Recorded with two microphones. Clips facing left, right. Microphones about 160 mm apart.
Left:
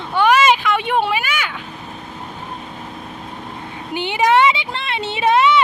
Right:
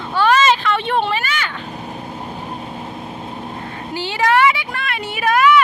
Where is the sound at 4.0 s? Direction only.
20° left (ahead or behind).